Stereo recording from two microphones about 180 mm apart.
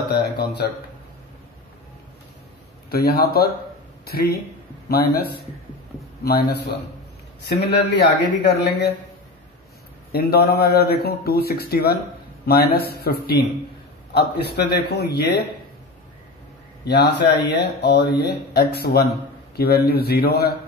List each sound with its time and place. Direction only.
0.2 s speech: 65° left (ahead or behind)
2.9 s a man's voice: 60° left (ahead or behind)
10.1 s speech: 60° left (ahead or behind)
17.3 s speech: 65° left (ahead or behind)